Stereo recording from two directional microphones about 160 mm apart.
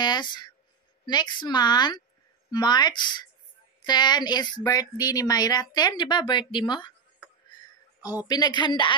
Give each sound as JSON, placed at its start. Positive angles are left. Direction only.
{"t": 0.0, "sound": "speech", "side_deg": 25}
{"t": 8.3, "sound": "speech", "side_deg": 25}